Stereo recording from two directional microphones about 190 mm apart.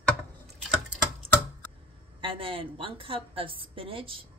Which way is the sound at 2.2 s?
30° right (ahead or behind).